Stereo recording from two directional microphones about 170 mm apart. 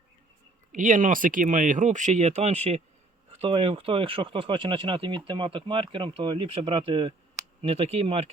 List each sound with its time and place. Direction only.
0.7 s speech: 50° right (ahead or behind)